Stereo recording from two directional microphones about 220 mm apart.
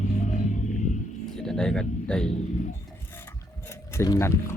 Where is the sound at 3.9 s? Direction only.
10° left (ahead or behind).